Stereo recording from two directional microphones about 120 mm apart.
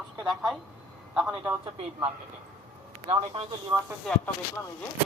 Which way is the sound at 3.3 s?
50° right (ahead or behind).